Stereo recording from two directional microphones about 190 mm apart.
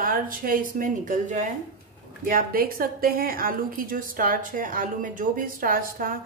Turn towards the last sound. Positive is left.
turn(degrees=-45)  # may be behind; listen again after turning